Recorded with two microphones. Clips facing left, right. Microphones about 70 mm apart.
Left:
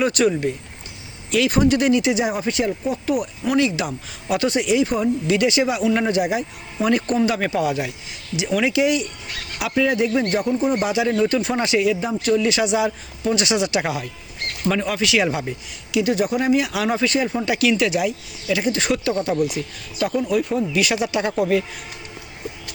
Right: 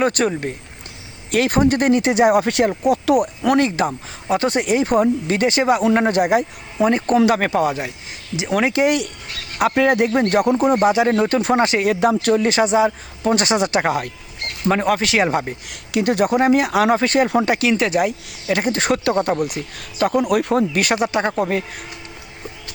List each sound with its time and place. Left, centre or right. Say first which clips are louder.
0.0 s speech: even; right
6.7 s speech: right 2 dB; right
7.3 s speech: right 4 dB; right
10.8 s speech: right 4 dB; right
11.9 s speech: right 4 dB; right
17.6 s speech: right 1 dB; right
20.1 s speech: right 3 dB; right
20.7 s speech: right 2 dB; right